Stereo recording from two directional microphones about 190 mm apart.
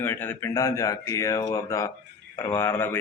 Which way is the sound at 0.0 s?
10° left (ahead or behind).